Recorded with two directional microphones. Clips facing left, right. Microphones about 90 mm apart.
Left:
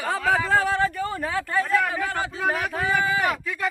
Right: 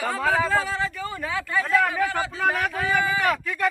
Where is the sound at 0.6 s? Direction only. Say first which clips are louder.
Left 4 dB; 55° left (ahead or behind).